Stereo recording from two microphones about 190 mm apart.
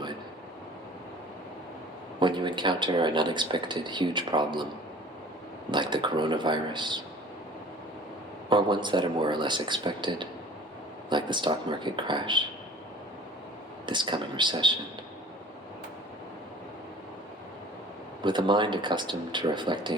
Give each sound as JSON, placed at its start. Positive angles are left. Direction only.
{"t": 2.1, "sound": "speech", "side_deg": -25}
{"t": 5.7, "sound": "speech", "side_deg": -25}
{"t": 8.4, "sound": "speech", "side_deg": -25}
{"t": 13.8, "sound": "speech", "side_deg": -25}
{"t": 18.2, "sound": "speech", "side_deg": -25}